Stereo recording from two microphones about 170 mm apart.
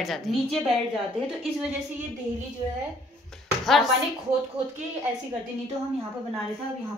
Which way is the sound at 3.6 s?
Centre (ahead or behind).